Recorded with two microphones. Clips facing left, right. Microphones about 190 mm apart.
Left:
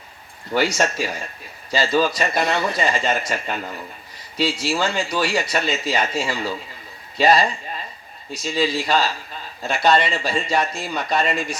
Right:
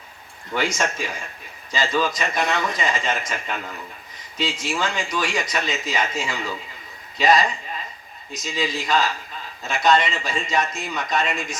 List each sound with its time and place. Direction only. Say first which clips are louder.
0.5 s a man's voice: left 4 dB; 35° left (ahead or behind)
4.6 s a man's voice: left 3 dB; 30° left (ahead or behind)